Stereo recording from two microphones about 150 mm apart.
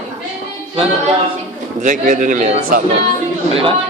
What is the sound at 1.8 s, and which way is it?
Speech, 60° right (ahead or behind).